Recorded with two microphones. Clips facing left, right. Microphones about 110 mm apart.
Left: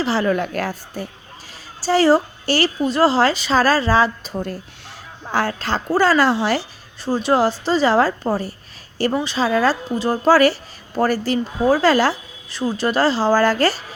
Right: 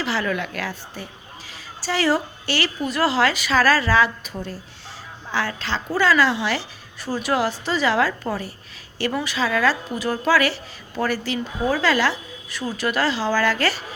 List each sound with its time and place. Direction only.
0.0 s a woman's voice: 35° left (ahead or behind)
5.3 s speech: 45° left (ahead or behind)
7.1 s speech: 30° left (ahead or behind)